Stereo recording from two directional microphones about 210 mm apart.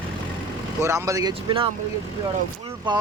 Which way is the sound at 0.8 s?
15° right (ahead or behind).